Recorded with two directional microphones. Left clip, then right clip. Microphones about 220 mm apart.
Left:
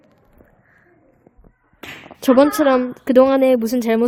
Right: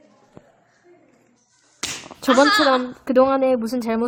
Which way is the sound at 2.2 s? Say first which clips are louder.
Left 1 dB; 45° left (ahead or behind).